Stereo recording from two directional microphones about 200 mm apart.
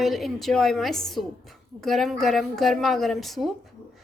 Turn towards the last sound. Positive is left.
turn(degrees=0)  # may be behind; listen again after turning